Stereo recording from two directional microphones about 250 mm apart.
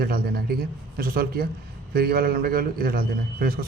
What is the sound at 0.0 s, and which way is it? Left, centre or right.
A man's voice, right.